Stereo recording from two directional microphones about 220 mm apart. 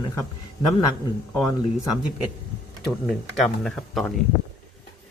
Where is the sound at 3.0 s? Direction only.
5° left (ahead or behind).